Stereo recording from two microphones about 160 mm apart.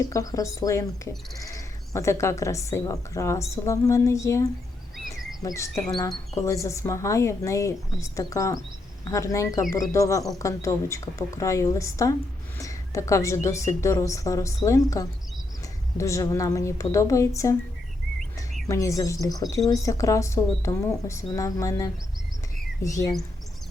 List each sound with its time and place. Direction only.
0.1 s speech: 20° left (ahead or behind)
4.9 s a sound: centre (ahead or behind)
5.4 s speech: 20° left (ahead or behind)
18.7 s speech: 20° left (ahead or behind)